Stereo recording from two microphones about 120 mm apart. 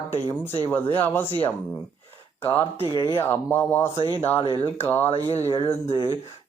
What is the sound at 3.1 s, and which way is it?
Speech, 20° left (ahead or behind).